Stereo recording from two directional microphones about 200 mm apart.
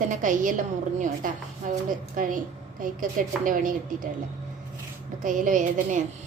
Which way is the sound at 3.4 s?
40° right (ahead or behind).